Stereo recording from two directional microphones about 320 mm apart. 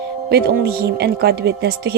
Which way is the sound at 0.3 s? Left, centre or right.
Right.